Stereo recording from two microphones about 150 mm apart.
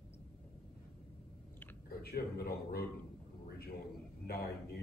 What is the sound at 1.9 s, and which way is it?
Speech, 90° left.